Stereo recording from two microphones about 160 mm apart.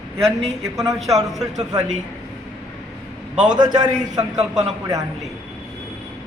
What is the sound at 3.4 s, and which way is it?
Speech, 25° right (ahead or behind).